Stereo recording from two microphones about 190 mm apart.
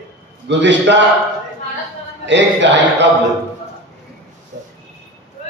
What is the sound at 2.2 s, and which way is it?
Speech, 70° right (ahead or behind).